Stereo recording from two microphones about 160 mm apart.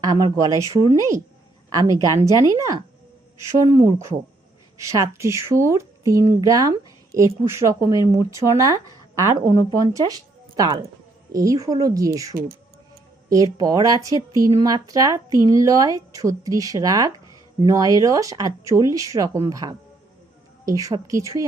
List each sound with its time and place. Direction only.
0.0 s speech: 25° right (ahead or behind)